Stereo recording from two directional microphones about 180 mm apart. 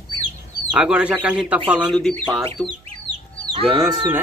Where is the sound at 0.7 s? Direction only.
5° right (ahead or behind).